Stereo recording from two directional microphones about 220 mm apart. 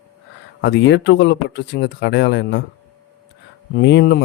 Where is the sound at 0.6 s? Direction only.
50° left (ahead or behind).